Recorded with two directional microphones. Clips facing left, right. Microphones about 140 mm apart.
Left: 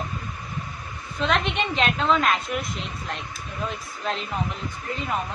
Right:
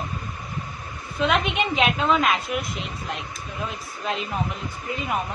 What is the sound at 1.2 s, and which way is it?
A woman's voice, 5° right (ahead or behind).